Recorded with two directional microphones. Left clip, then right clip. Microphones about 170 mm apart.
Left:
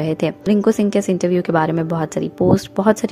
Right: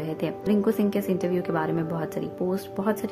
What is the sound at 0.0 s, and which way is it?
A woman's voice, 40° left (ahead or behind).